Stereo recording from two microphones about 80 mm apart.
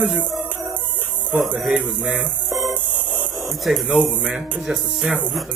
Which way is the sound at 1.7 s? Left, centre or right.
Centre.